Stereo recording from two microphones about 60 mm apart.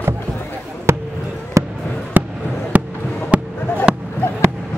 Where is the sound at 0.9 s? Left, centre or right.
Right.